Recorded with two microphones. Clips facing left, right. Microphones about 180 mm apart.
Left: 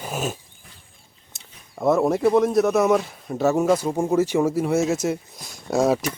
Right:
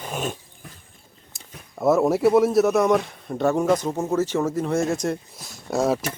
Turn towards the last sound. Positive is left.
turn(degrees=0)  # may be behind; listen again after turning